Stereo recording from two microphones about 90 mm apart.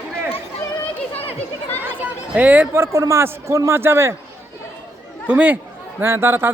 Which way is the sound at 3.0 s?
30° right (ahead or behind).